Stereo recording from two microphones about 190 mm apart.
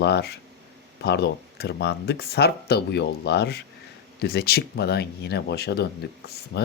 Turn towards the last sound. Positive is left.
turn(degrees=60)  # may be behind; listen again after turning